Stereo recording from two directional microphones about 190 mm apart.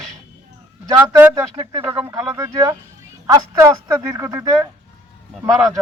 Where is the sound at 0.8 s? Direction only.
15° right (ahead or behind).